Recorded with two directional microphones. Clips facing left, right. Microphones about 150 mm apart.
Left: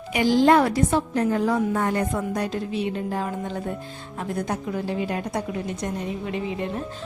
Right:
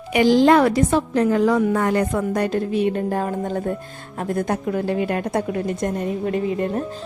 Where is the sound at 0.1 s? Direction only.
80° right; by 6.8 s 50° right (ahead or behind).